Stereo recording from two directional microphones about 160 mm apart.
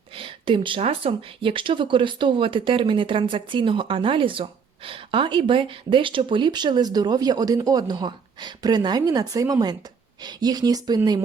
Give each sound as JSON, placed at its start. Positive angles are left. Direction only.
{"t": 0.2, "sound": "speech", "side_deg": -30}